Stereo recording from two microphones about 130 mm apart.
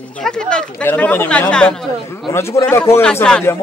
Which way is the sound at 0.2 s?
5° left (ahead or behind).